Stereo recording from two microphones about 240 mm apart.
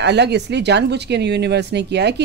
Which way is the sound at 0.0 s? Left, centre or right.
Right.